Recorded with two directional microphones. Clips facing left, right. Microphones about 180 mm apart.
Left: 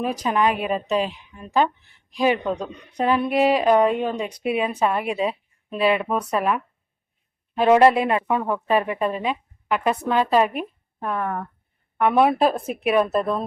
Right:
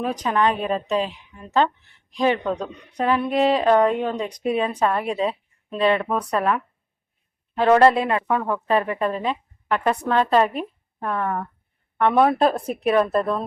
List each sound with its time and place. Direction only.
0.0 s a woman's voice: 10° left (ahead or behind)